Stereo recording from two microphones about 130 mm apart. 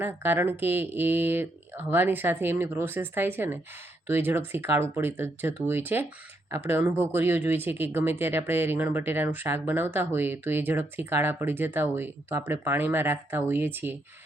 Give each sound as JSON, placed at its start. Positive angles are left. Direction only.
{"t": 0.0, "sound": "speech", "side_deg": -15}